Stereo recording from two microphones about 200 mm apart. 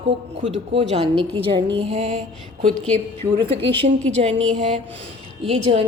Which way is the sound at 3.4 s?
25° right (ahead or behind).